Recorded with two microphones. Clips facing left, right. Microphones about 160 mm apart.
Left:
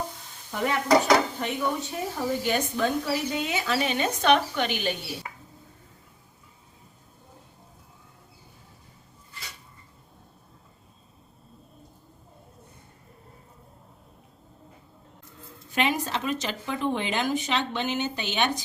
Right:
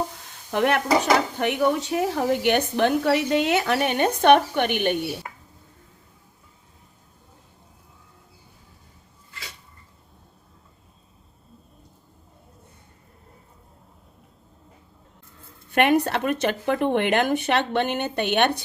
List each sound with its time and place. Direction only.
0.5 s a woman's voice: 75° right (ahead or behind)
15.7 s speech: 60° right (ahead or behind)